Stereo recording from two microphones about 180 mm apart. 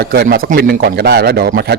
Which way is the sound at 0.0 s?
60° right (ahead or behind).